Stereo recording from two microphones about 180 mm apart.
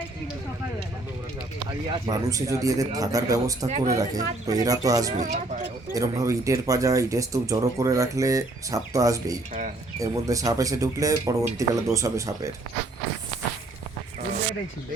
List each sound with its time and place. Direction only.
2.0 s speech: 20° right (ahead or behind)
5.1 s speech: 45° right (ahead or behind)
5.9 s speech: 20° right (ahead or behind)